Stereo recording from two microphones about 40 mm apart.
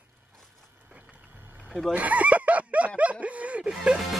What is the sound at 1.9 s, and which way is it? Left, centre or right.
Speech, right.